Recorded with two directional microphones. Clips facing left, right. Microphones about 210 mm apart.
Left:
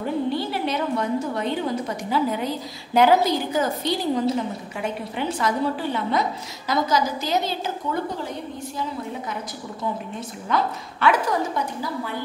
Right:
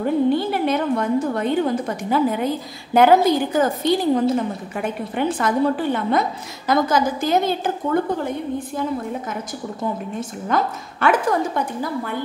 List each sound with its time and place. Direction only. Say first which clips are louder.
0.3 s a woman's voice: right 6 dB; 50° right (ahead or behind)
10.5 s a woman's voice: right 2 dB; 50° right (ahead or behind)